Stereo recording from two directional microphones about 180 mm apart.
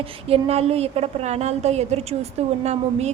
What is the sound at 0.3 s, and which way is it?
A woman's voice, 35° right (ahead or behind).